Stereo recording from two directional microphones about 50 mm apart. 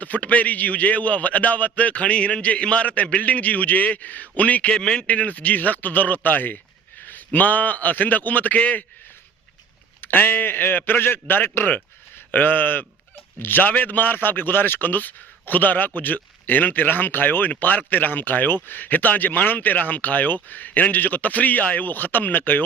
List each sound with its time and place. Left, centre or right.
0.0 s a man's voice: left
4.8 s speech: centre
5.0 s speech: left
7.0 s a sound: left
7.3 s speech: left
10.0 s a man's voice: left